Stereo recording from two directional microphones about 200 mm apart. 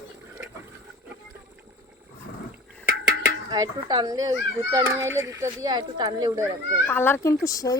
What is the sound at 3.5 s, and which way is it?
A child's voice, 20° right (ahead or behind).